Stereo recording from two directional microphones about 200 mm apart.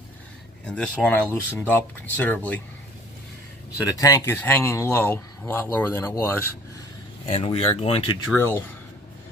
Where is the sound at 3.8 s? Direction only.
15° left (ahead or behind).